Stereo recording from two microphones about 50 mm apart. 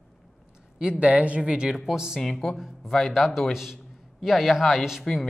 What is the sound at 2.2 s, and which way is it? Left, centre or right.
Speech, centre.